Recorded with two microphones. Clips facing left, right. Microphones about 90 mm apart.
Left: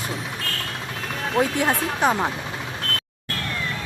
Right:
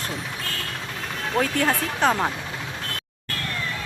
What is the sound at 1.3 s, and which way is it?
Speech, 15° left (ahead or behind).